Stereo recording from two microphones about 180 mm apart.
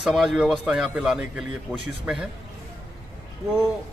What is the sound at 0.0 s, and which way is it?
A man's voice, centre (ahead or behind).